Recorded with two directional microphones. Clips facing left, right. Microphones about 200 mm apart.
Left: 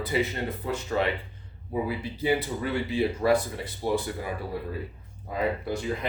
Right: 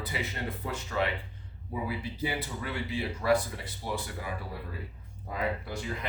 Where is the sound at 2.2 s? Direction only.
25° left (ahead or behind).